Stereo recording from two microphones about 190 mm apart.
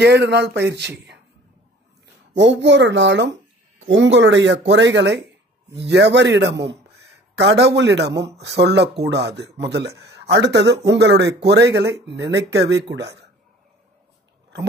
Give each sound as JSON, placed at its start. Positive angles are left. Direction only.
{"t": 0.0, "sound": "speech", "side_deg": -60}
{"t": 2.3, "sound": "a man's voice", "side_deg": -70}